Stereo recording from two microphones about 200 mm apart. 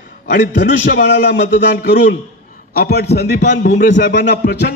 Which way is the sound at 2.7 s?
50° left (ahead or behind).